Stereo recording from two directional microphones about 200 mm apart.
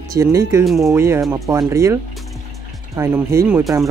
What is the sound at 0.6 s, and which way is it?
Speech, centre (ahead or behind).